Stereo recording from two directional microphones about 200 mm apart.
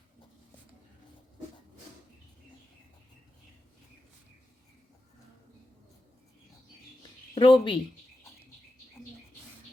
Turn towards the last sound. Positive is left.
turn(degrees=25)  # may be behind; listen again after turning